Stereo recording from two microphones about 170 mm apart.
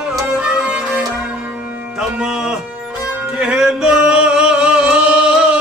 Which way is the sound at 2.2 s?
5° right (ahead or behind).